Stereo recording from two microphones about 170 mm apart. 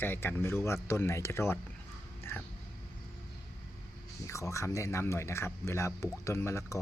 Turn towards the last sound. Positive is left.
turn(degrees=15)  # may be behind; listen again after turning